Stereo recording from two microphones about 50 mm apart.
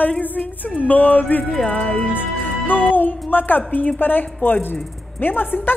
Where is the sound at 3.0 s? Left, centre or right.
Left.